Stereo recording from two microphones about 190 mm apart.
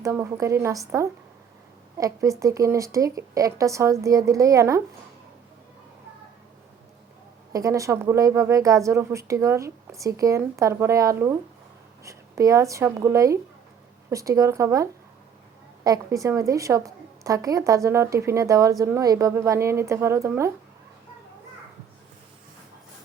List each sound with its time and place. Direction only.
0.0 s a woman's voice: 15° right (ahead or behind)
7.5 s a woman's voice: 15° right (ahead or behind)